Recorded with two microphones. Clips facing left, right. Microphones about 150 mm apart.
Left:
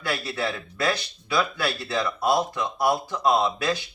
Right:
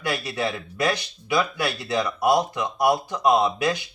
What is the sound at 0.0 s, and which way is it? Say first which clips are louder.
Speech: right 2 dB; 20° right (ahead or behind).